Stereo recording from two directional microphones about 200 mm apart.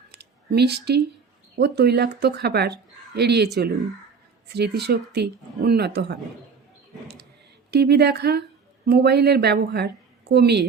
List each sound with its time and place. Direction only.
0.1 s a sound: 55° right (ahead or behind)
1.5 s a woman's voice: 55° right (ahead or behind)
7.7 s a woman's voice: 55° right (ahead or behind)